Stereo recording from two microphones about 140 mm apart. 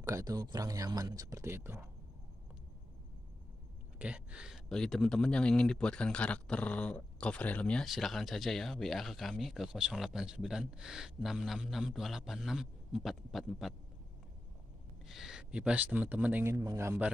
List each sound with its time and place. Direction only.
0.0 s speech: 25° right (ahead or behind)
4.0 s speech: 10° right (ahead or behind)
15.0 s speech: 5° right (ahead or behind)